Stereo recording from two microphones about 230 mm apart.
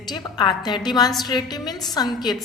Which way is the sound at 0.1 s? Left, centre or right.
Centre.